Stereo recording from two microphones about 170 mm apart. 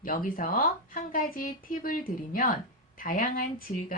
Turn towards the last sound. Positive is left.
turn(degrees=55)  # may be behind; listen again after turning